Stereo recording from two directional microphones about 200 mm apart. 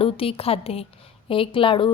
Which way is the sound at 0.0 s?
30° left (ahead or behind).